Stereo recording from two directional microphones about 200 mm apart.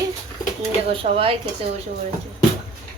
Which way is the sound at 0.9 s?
25° right (ahead or behind).